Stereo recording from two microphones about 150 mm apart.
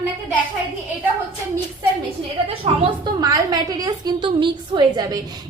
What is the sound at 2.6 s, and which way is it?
A woman's voice, 35° right (ahead or behind).